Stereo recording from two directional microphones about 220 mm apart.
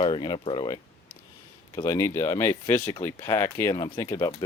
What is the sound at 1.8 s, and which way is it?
Speech, 15° left (ahead or behind).